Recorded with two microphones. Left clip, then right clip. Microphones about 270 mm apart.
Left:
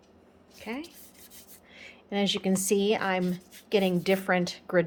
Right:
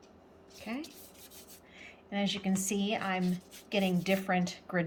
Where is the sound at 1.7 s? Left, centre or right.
Left.